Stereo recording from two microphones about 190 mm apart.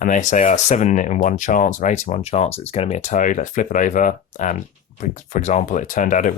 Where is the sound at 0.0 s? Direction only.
40° left (ahead or behind).